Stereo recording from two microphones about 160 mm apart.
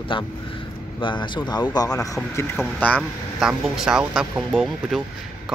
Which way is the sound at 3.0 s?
Centre (ahead or behind).